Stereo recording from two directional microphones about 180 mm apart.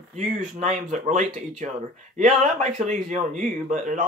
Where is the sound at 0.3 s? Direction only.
45° right (ahead or behind).